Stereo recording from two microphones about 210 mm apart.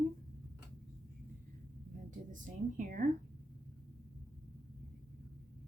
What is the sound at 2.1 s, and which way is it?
A woman's voice, 40° right (ahead or behind).